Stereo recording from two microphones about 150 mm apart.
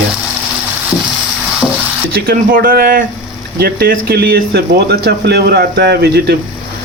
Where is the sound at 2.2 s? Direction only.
80° right.